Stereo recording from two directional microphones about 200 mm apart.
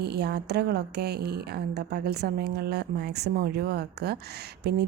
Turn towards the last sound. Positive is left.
turn(degrees=-55)  # may be behind; listen again after turning